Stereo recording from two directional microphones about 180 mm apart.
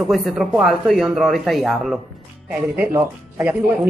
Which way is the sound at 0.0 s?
Centre (ahead or behind).